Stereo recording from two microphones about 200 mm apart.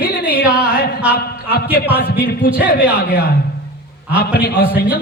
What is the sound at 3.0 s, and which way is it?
Speech, 50° left (ahead or behind).